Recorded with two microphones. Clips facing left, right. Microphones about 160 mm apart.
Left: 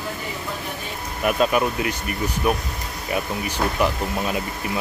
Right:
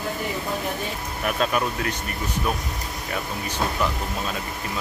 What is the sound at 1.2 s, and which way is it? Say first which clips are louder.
Speech: left 4 dB; 10° left (ahead or behind).